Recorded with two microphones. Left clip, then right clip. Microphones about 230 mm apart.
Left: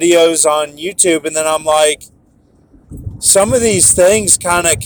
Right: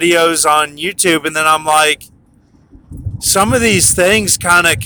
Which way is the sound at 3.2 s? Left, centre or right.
Centre.